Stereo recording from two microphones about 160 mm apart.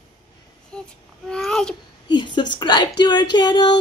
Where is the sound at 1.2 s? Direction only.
5° left (ahead or behind).